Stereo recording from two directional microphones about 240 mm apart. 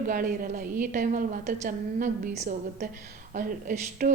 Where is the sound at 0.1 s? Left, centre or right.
Right.